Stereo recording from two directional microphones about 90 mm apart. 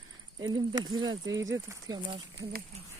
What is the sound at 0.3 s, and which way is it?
Speech, 55° right (ahead or behind).